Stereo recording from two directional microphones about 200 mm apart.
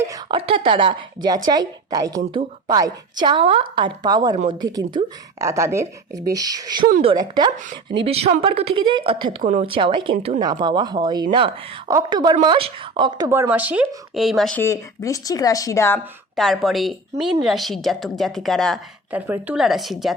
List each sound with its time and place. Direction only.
0.0 s a woman's voice: 20° right (ahead or behind); by 16.0 s 15° left (ahead or behind)
16.3 s a woman's voice: centre (ahead or behind)